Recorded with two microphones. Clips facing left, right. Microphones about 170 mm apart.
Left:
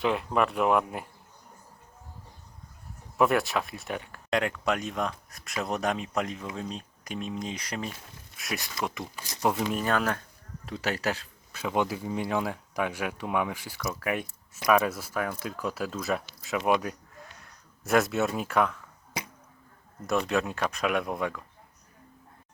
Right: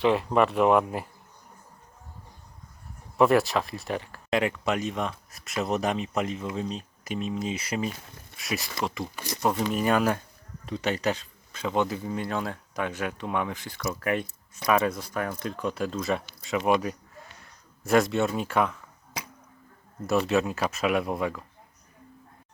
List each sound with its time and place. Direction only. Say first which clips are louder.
0.0 s speech: right 4 dB; centre (ahead or behind)
3.2 s speech: right 3 dB; centre (ahead or behind)
9.1 s speech: right 7 dB; 65° right (ahead or behind)
9.4 s speech: right 1 dB; 5° left (ahead or behind)
9.7 s speech: right 4 dB; 10° right (ahead or behind)
10.7 s speech: right 3 dB; 5° left (ahead or behind)
20.1 s speech: right 3 dB; 5° right (ahead or behind)